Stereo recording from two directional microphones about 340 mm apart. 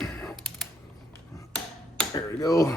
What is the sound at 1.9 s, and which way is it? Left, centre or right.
Finger snapping, centre.